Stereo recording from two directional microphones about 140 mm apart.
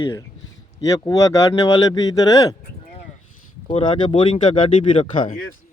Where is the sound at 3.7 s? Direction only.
35° left (ahead or behind).